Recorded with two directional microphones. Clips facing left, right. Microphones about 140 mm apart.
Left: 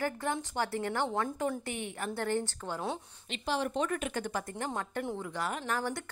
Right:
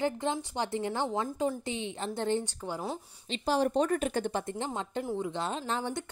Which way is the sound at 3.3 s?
40° right (ahead or behind).